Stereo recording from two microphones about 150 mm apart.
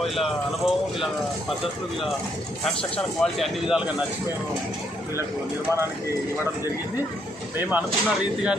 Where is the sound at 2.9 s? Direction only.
Centre (ahead or behind).